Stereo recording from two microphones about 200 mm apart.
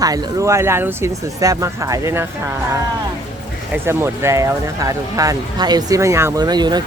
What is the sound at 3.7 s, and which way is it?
Speech, 10° right (ahead or behind).